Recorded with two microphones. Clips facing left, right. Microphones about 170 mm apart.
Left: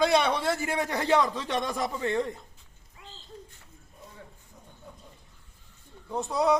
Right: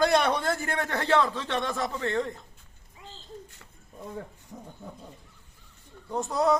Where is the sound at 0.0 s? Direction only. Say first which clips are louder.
Even; centre (ahead or behind).